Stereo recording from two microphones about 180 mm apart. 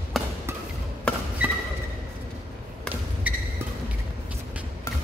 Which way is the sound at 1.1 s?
5° left (ahead or behind).